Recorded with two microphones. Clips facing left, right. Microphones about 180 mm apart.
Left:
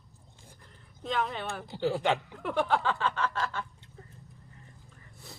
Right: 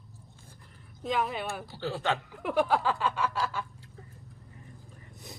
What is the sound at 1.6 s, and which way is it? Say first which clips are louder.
Speech: left 6 dB; 15° left (ahead or behind).